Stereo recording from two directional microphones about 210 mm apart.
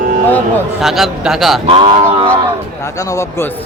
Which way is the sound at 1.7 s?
25° right (ahead or behind).